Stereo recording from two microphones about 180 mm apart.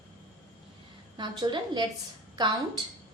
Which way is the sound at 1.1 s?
25° right (ahead or behind).